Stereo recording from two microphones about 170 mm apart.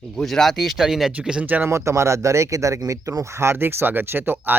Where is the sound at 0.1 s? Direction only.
Centre (ahead or behind).